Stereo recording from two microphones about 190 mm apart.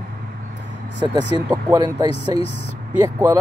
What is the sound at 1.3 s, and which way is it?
Speech, 20° right (ahead or behind).